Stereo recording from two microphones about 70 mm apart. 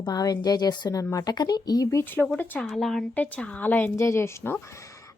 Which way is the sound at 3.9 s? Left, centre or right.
Left.